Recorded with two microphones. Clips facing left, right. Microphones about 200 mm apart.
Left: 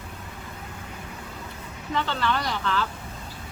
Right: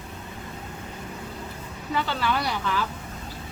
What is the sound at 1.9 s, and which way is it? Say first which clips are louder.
Speech: even; 10° right (ahead or behind).